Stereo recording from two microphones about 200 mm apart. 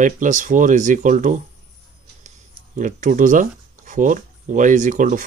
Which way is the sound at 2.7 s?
40° right (ahead or behind).